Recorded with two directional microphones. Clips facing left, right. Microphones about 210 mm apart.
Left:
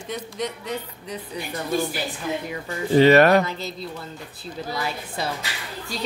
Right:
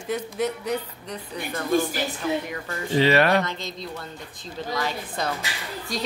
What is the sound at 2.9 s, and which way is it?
Speech, 45° left (ahead or behind).